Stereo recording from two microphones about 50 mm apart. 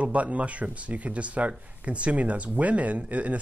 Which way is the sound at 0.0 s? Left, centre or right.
Right.